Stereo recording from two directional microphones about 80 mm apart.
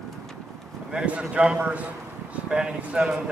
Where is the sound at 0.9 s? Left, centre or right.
Centre.